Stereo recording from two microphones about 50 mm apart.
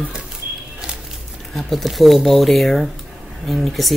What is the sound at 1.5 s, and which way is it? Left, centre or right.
Speech, centre.